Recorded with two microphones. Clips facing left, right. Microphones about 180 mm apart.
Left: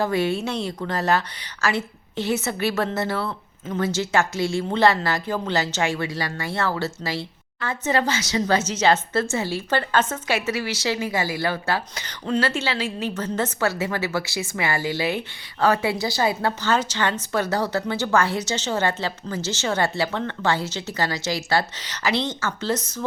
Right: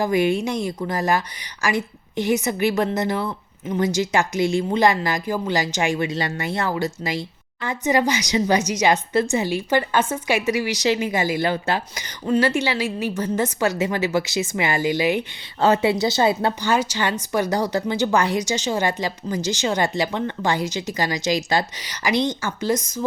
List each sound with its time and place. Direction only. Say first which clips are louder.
0.0 s a woman's voice: right 3 dB; 15° right (ahead or behind)